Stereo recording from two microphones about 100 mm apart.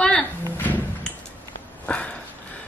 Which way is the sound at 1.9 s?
10° left (ahead or behind).